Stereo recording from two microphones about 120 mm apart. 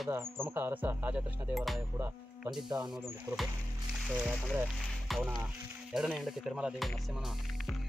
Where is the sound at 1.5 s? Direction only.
Centre (ahead or behind).